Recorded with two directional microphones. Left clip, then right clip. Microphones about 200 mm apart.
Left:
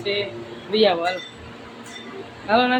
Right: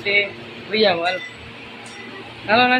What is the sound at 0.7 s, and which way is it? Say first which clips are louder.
Speech: right 1 dB; centre (ahead or behind).